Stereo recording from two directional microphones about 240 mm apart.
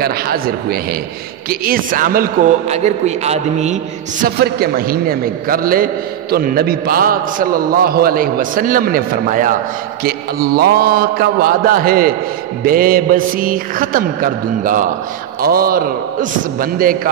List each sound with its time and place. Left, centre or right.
0.0 s a man's voice: right